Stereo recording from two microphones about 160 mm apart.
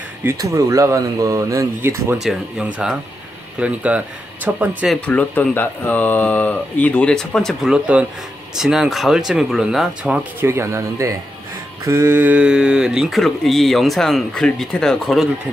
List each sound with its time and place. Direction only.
0.2 s speech: 15° right (ahead or behind)
2.2 s speech: 5° right (ahead or behind)
5.0 s speech: 10° left (ahead or behind)